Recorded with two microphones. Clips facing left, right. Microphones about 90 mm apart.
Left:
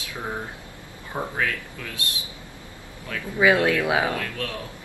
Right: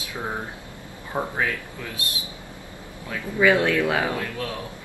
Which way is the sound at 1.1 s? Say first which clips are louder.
Right 2 dB; 20° right (ahead or behind).